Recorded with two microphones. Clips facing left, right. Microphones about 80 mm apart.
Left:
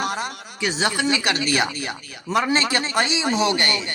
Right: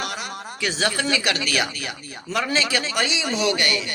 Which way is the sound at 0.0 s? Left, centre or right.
Left.